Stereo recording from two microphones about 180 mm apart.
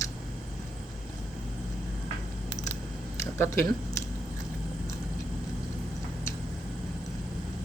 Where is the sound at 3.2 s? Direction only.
15° left (ahead or behind).